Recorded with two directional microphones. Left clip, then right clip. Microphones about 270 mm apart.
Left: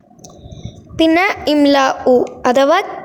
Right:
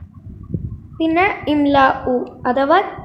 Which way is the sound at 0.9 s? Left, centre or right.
Left.